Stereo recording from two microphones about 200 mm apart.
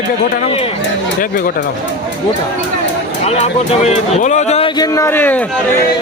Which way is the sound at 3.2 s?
30° left (ahead or behind).